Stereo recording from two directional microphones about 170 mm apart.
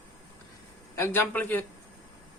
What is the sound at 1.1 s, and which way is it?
Speech, 10° left (ahead or behind).